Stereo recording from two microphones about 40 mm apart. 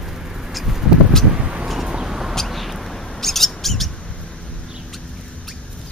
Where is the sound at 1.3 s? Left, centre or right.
Right.